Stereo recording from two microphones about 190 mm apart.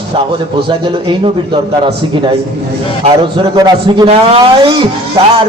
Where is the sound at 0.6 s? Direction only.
25° right (ahead or behind).